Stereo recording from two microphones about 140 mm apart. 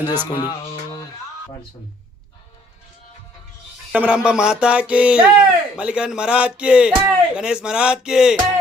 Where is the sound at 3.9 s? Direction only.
10° right (ahead or behind).